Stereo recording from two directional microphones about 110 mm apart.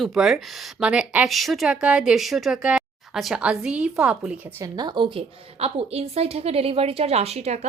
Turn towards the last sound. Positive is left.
turn(degrees=-85)